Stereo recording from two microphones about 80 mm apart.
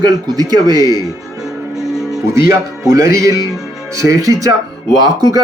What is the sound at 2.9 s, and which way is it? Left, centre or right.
Speech, right.